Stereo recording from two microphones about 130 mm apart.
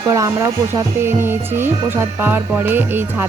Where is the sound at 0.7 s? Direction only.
20° right (ahead or behind).